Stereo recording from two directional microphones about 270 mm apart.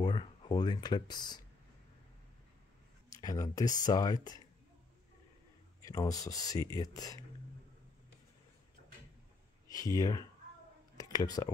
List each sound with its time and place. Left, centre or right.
0.0 s speech: centre
3.1 s speech: centre
5.9 s speech: centre
9.7 s speech: centre
11.0 s a sound: centre